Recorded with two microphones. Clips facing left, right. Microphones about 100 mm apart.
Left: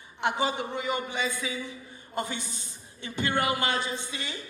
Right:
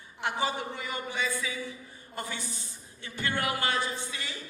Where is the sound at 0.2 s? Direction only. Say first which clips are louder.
Left 3 dB; 20° left (ahead or behind).